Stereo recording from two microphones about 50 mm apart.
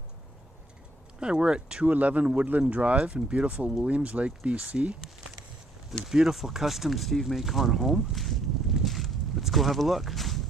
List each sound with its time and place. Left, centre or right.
1.2 s speech: centre
6.0 s speech: centre